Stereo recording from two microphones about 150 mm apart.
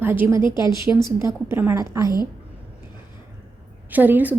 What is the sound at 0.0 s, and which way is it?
A woman's voice, 15° right (ahead or behind).